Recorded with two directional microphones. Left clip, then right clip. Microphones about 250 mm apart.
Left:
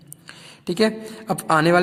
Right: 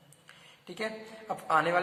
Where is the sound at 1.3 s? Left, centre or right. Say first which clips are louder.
Left 9 dB; left.